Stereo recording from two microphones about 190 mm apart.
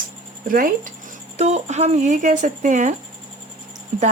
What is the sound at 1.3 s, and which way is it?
Speech, 35° right (ahead or behind).